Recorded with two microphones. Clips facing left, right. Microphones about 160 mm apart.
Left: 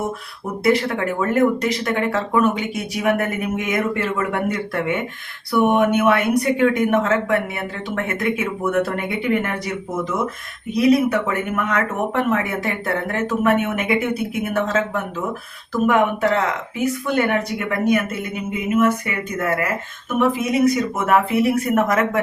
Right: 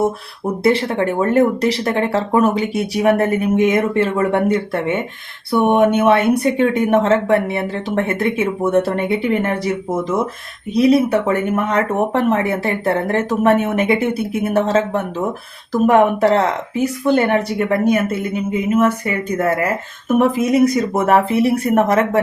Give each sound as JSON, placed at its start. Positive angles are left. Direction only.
{"t": 0.6, "sound": "speech", "side_deg": -30}
{"t": 10.8, "sound": "speech", "side_deg": -30}